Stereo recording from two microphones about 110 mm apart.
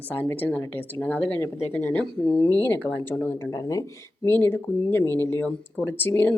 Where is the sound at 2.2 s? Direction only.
45° left (ahead or behind).